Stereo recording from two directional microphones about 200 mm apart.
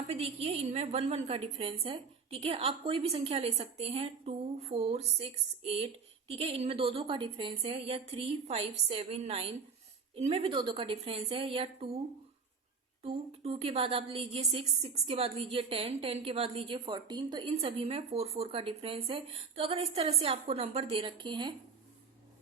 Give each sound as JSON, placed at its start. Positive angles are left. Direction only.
{"t": 0.1, "sound": "a woman's voice", "side_deg": -30}
{"t": 13.0, "sound": "a woman's voice", "side_deg": -30}